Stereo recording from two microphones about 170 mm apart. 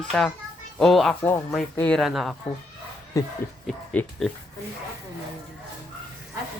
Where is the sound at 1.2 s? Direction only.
15° left (ahead or behind); by 2.3 s centre (ahead or behind).